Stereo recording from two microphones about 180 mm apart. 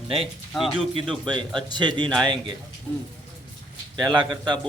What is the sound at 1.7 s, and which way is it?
Speech, 25° right (ahead or behind).